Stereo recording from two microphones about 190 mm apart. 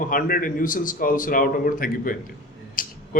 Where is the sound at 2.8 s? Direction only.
45° left (ahead or behind).